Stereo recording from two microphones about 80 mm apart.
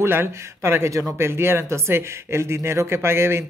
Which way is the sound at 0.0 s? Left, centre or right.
Right.